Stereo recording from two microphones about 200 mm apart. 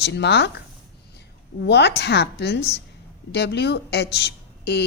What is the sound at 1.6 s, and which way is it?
A woman's voice, 55° left (ahead or behind).